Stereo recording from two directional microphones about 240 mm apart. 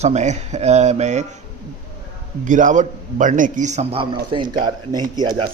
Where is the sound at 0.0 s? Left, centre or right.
Right.